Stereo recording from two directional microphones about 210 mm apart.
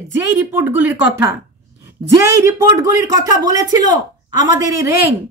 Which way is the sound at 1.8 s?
15° right (ahead or behind).